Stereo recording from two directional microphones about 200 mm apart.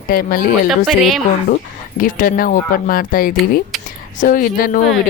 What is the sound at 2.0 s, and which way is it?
Speech, 45° left (ahead or behind).